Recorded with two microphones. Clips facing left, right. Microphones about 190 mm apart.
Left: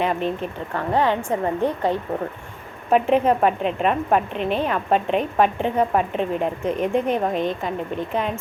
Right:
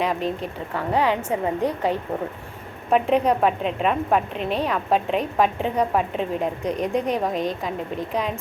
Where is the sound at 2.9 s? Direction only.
Centre (ahead or behind).